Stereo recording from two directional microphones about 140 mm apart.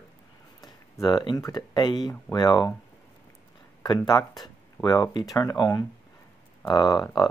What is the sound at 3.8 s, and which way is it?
Speech, 30° left (ahead or behind).